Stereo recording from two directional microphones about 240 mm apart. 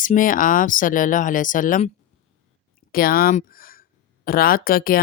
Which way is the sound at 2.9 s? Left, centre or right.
Left.